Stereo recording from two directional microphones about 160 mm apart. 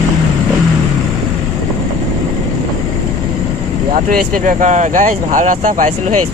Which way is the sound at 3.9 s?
60° right (ahead or behind).